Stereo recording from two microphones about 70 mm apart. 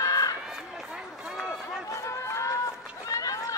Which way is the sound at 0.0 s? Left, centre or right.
Left.